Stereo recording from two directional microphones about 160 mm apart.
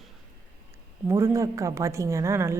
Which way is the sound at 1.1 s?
20° right (ahead or behind).